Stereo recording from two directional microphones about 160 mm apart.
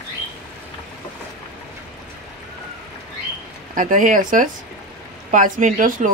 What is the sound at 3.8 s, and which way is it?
Speech, 55° right (ahead or behind).